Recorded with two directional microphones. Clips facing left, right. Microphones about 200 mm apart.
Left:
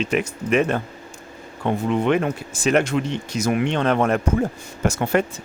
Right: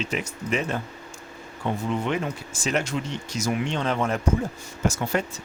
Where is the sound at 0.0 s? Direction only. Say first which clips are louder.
Left 7 dB; 60° left (ahead or behind).